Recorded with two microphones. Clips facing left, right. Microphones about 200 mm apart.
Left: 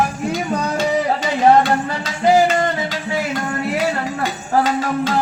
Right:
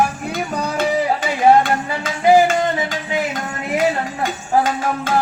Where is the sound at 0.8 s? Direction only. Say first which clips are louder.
Right 2 dB; 50° right (ahead or behind).